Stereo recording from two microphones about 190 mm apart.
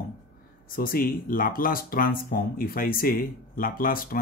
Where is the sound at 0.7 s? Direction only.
50° left (ahead or behind).